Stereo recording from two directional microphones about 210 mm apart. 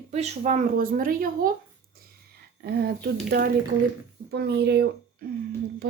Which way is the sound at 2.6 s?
50° right (ahead or behind).